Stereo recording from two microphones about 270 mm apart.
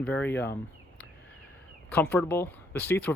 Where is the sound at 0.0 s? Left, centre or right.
Centre.